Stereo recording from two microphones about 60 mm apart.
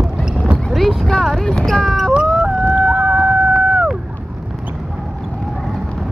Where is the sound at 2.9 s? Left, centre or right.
Centre.